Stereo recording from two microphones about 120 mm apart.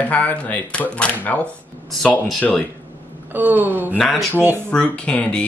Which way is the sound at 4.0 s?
Centre (ahead or behind).